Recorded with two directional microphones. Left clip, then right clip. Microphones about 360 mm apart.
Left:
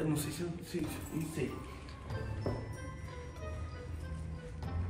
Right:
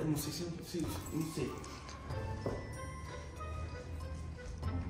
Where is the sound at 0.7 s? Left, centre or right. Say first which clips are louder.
Left 1 dB; centre.